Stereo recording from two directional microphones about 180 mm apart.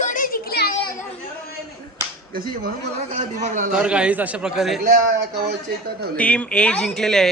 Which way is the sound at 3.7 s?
5° right (ahead or behind).